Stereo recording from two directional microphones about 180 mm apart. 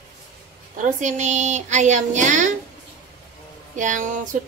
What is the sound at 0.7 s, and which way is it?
Speech, 40° right (ahead or behind).